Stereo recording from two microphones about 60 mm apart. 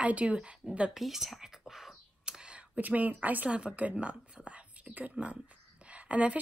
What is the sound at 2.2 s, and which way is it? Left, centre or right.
Speech, centre.